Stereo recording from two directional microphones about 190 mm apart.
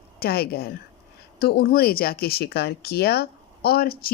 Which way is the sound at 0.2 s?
55° left (ahead or behind).